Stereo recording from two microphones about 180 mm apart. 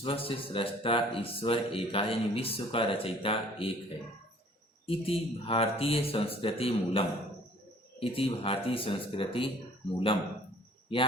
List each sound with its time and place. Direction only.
0.0 s speech: 30° left (ahead or behind)
4.9 s speech: 30° left (ahead or behind)
10.9 s speech: 30° left (ahead or behind)